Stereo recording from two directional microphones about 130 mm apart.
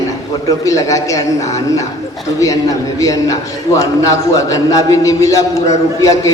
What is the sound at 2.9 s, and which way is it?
A man's voice, 25° left (ahead or behind).